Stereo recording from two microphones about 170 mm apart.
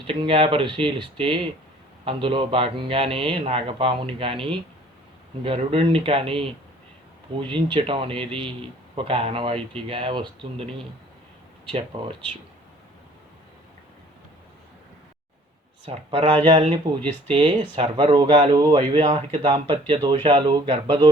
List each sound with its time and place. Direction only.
0.1 s a man's voice: 30° right (ahead or behind)
11.9 s speech: 30° right (ahead or behind)
15.9 s a man's voice: 30° right (ahead or behind)